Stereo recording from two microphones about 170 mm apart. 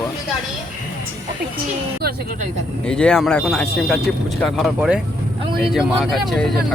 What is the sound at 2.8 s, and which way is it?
Speech, 5° left (ahead or behind).